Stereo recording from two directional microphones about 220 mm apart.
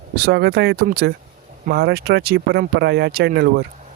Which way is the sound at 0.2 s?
45° right (ahead or behind).